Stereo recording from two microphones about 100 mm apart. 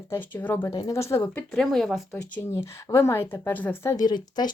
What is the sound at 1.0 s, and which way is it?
Speech, 30° left (ahead or behind).